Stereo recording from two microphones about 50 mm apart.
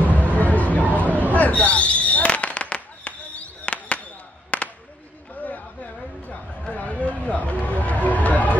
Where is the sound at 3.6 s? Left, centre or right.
Left.